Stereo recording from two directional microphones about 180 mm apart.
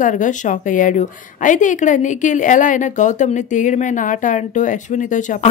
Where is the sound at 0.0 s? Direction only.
45° left (ahead or behind).